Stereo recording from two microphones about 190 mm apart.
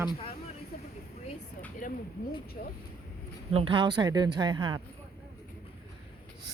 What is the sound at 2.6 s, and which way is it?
Speech, 50° left (ahead or behind).